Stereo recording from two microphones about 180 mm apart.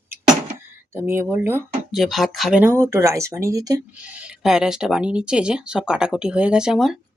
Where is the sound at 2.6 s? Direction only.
15° right (ahead or behind).